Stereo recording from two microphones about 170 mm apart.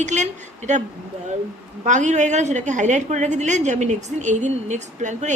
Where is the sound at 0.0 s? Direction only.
45° right (ahead or behind).